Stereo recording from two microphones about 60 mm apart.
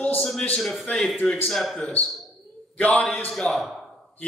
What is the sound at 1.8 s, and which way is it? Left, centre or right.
Speech, left.